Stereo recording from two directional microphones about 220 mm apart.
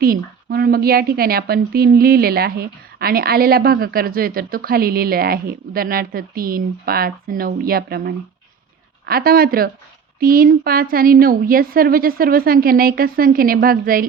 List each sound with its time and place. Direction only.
0.0 s a woman's voice: 45° right (ahead or behind)